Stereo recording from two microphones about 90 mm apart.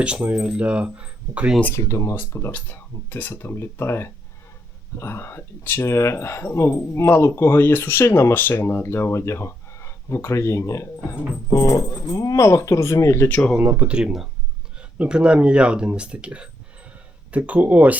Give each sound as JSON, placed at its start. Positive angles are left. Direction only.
{"t": 0.0, "sound": "speech", "side_deg": -15}
{"t": 1.7, "sound": "speech", "side_deg": 35}
{"t": 2.5, "sound": "speech", "side_deg": 20}
{"t": 13.2, "sound": "speech", "side_deg": 15}
{"t": 13.7, "sound": "speech", "side_deg": -10}